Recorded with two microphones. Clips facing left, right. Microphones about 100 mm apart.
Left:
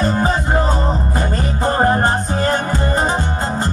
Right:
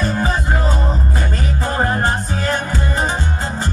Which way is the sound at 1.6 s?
45° left (ahead or behind).